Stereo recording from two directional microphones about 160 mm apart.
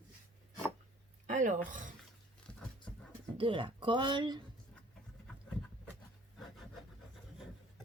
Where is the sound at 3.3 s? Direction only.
30° right (ahead or behind).